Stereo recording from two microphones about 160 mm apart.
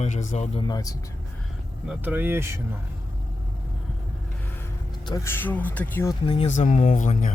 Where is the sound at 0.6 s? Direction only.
25° left (ahead or behind).